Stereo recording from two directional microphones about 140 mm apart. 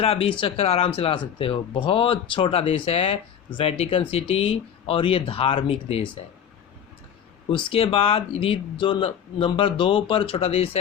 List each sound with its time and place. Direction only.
0.0 s speech: 40° left (ahead or behind)
7.5 s speech: 40° left (ahead or behind)